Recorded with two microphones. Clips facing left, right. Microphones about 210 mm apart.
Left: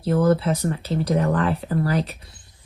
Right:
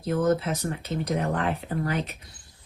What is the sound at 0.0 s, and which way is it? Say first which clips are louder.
Speech: left 4 dB; 30° left (ahead or behind).